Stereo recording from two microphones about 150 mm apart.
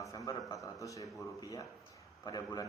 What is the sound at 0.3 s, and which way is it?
A man's voice, 20° left (ahead or behind).